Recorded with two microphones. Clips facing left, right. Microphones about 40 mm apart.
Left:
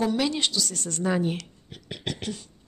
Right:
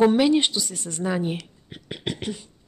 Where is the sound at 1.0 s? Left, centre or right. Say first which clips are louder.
Even; centre.